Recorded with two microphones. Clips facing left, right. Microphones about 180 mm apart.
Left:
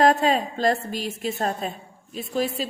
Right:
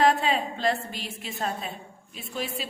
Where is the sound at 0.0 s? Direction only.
40° left (ahead or behind).